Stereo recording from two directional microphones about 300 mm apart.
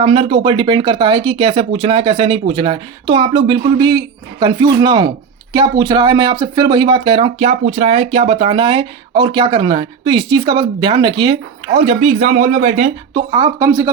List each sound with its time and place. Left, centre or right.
0.0 s speech: centre
13.1 s speech: centre